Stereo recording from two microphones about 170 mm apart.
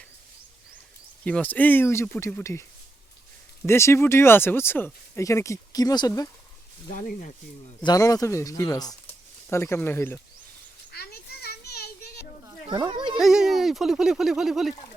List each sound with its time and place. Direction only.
1.2 s speech: 10° left (ahead or behind)
3.7 s speech: 15° left (ahead or behind)
6.9 s speech: 50° left (ahead or behind)
7.8 s speech: 25° left (ahead or behind)
10.9 s children playing: 65° left (ahead or behind)
12.9 s a sound: 25° right (ahead or behind)
13.1 s speech: 5° right (ahead or behind)